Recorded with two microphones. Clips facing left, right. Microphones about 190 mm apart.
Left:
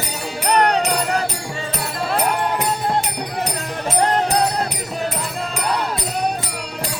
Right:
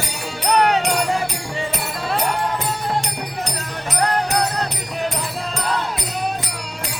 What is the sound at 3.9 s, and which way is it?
Music, 25° left (ahead or behind).